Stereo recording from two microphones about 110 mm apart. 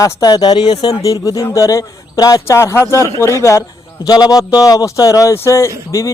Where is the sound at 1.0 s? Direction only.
30° left (ahead or behind).